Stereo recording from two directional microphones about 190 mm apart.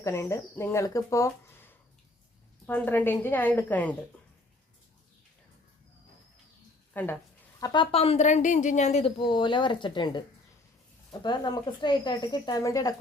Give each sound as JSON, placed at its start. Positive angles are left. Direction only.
{"t": 0.0, "sound": "a woman's voice", "side_deg": 15}
{"t": 6.9, "sound": "speech", "side_deg": 10}
{"t": 7.6, "sound": "a woman's voice", "side_deg": 25}